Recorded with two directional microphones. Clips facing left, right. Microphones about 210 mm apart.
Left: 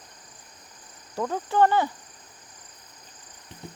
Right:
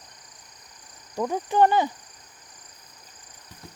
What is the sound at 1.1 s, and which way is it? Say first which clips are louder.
Speech: right 1 dB; 15° right (ahead or behind).